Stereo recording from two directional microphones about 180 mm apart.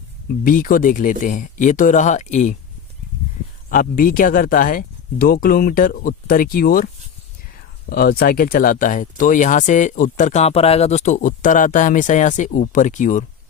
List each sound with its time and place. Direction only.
0.4 s speech: 50° left (ahead or behind)
3.7 s speech: 50° left (ahead or behind)